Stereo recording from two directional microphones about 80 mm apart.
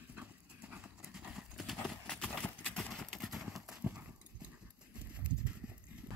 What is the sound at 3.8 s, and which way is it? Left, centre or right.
Clip-clop, centre.